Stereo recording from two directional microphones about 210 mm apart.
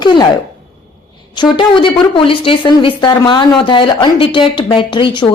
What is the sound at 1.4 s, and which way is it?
Speech, 25° left (ahead or behind).